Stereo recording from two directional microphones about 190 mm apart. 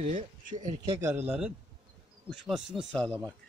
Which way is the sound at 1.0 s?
10° right (ahead or behind).